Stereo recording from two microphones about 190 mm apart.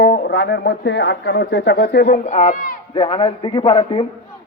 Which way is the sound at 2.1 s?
40° left (ahead or behind).